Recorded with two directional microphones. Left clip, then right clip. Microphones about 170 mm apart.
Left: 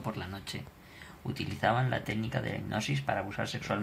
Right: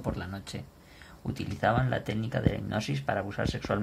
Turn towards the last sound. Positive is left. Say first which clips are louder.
# right 3 dB
turn(degrees=-50)  # may be behind; listen again after turning